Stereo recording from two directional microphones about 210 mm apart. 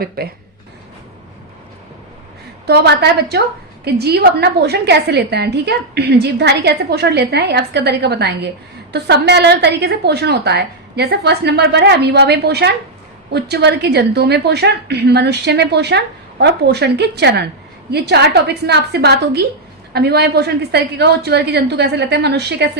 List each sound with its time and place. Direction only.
0.2 s a woman's voice: 45° right (ahead or behind)
2.6 s a woman's voice: 50° right (ahead or behind)